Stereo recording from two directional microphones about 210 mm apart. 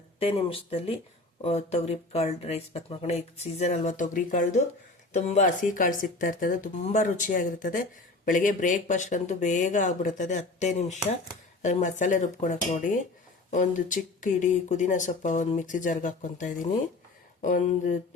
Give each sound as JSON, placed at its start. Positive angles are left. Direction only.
{"t": 0.2, "sound": "speech", "side_deg": 30}